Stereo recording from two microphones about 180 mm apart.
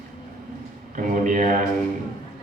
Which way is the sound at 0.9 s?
45° right (ahead or behind).